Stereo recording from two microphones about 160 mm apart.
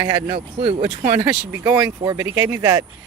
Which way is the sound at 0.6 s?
30° right (ahead or behind).